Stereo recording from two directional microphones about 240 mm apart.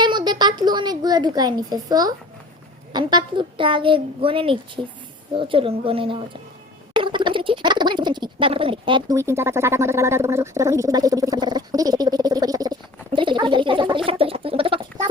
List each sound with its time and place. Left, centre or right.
0.0 s a child's voice: centre